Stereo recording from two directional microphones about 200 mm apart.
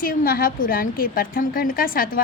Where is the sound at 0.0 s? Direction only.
45° left (ahead or behind).